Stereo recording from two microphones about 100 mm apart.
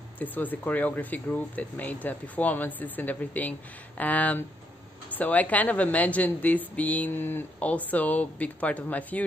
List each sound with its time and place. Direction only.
0.2 s a woman's voice: 15° left (ahead or behind)